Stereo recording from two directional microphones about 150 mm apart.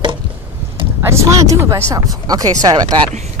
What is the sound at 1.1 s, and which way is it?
Speech, 20° right (ahead or behind).